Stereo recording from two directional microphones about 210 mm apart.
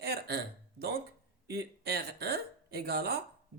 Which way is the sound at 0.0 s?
50° right (ahead or behind).